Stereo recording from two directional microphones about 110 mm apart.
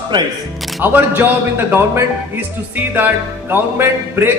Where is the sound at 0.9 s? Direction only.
20° right (ahead or behind).